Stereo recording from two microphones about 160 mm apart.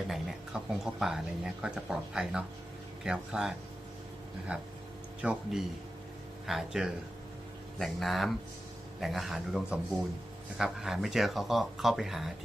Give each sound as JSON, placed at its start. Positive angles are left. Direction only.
{"t": 0.1, "sound": "speech", "side_deg": 0}
{"t": 5.2, "sound": "speech", "side_deg": -5}